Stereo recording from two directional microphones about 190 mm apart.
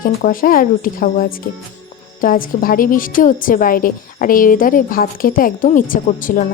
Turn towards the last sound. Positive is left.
turn(degrees=45)  # may be behind; listen again after turning